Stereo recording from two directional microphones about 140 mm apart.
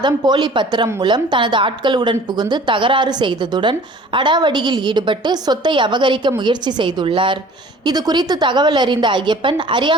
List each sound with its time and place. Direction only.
0.0 s a woman's voice: 35° right (ahead or behind)